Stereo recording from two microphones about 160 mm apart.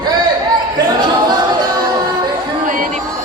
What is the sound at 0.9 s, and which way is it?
A capella, 30° right (ahead or behind).